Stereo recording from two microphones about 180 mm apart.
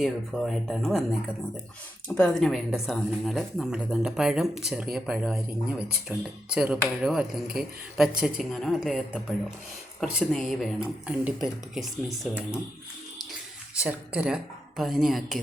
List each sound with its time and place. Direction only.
0.0 s a woman's voice: centre (ahead or behind)
2.0 s a woman's voice: 5° left (ahead or behind)
13.7 s a woman's voice: 5° right (ahead or behind)